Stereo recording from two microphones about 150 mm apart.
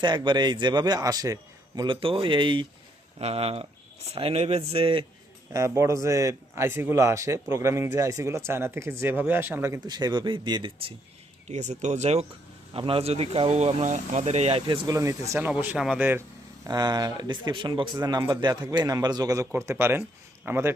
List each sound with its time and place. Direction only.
0.0 s speech: 30° right (ahead or behind)
5.5 s speech: 20° right (ahead or behind)
11.4 s speech: 50° right (ahead or behind)
14.7 s speech: 25° right (ahead or behind)
16.6 s speech: 25° right (ahead or behind)